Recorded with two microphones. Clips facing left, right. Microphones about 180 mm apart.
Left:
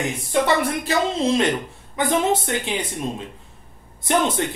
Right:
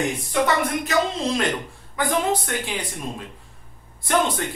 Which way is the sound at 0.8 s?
25° left (ahead or behind).